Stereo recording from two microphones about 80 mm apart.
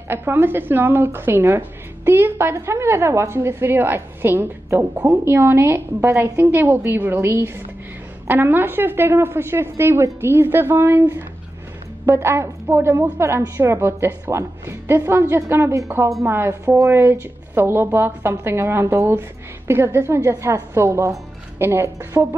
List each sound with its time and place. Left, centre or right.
0.1 s a woman's voice: right